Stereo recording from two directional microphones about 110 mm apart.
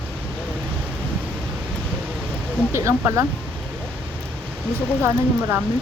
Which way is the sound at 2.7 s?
25° right (ahead or behind).